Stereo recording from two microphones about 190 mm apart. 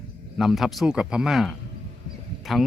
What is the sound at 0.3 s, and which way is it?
Speech, centre (ahead or behind).